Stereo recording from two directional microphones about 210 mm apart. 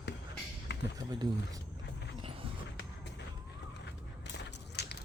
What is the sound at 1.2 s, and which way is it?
Speech, 15° right (ahead or behind).